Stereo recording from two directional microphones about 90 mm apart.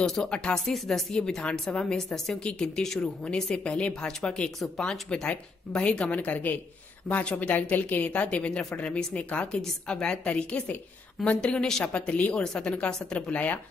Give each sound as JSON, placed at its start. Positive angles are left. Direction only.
{"t": 0.0, "sound": "a woman's voice", "side_deg": 10}